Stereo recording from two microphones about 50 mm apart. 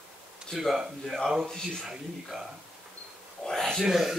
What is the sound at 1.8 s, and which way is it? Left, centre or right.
Speech, centre.